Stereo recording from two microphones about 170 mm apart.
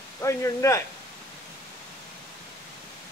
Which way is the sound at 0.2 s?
15° left (ahead or behind).